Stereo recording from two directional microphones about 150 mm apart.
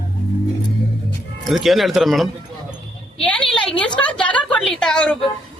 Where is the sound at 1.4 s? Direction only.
Centre (ahead or behind).